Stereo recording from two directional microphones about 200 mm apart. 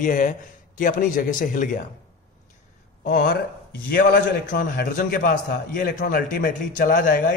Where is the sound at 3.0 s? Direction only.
40° left (ahead or behind).